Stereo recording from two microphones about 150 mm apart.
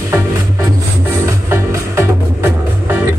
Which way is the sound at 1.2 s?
20° right (ahead or behind).